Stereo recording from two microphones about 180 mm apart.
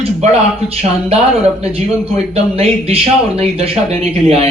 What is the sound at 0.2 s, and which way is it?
Speech, 40° right (ahead or behind).